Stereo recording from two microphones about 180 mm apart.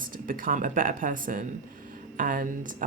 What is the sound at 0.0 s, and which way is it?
Speech, 50° right (ahead or behind).